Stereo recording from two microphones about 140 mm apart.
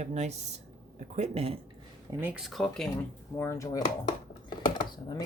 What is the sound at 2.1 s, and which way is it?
Speech, 15° right (ahead or behind).